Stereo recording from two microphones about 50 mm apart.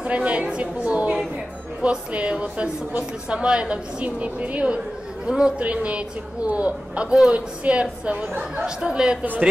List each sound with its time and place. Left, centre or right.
0.0 s a woman's voice: right
5.2 s speech: centre
5.6 s a woman's voice: right